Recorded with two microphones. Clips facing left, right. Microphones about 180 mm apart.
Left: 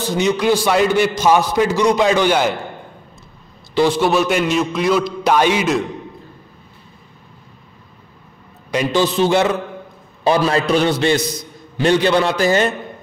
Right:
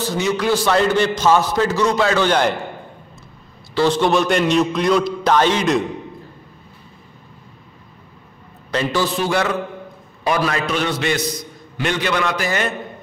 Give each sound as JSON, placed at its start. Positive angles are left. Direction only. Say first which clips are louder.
{"t": 0.0, "sound": "a man's voice", "louder": "left 3 dB", "side_deg": 20}
{"t": 3.7, "sound": "a man's voice", "louder": "left 1 dB", "side_deg": 10}
{"t": 8.7, "sound": "a man's voice", "louder": "left 3 dB", "side_deg": 20}